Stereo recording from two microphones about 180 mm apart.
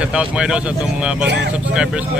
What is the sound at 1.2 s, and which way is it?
Speech, 75° right (ahead or behind).